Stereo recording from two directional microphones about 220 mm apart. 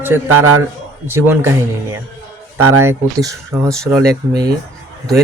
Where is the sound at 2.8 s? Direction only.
10° right (ahead or behind).